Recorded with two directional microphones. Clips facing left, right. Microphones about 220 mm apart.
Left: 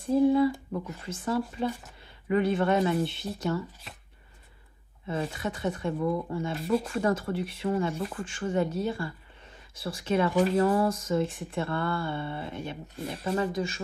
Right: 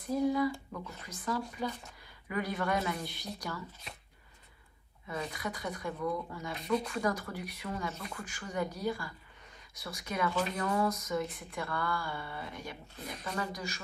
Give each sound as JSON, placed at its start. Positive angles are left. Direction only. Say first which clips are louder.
{"t": 0.0, "sound": "speech", "louder": "left 8 dB", "side_deg": 30}
{"t": 5.0, "sound": "speech", "louder": "left 6 dB", "side_deg": 30}